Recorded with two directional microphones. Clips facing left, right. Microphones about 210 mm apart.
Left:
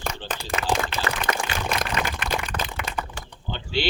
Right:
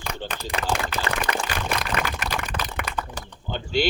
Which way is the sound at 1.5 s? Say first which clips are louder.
Even; 45° left (ahead or behind).